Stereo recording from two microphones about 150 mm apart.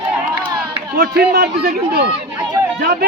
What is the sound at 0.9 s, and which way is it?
A man's voice, 85° right.